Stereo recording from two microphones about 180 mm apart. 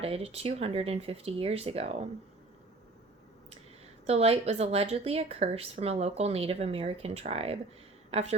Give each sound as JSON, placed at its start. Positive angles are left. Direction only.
{"t": 0.0, "sound": "a woman's voice", "side_deg": -35}
{"t": 4.0, "sound": "a woman's voice", "side_deg": -35}